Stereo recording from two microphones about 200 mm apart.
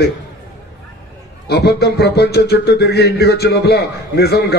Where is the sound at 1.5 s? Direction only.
55° left (ahead or behind).